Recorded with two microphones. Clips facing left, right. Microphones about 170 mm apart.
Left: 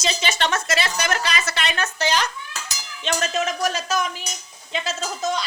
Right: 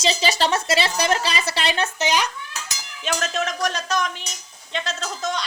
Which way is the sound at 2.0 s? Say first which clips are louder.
Left 3 dB; 15° right (ahead or behind).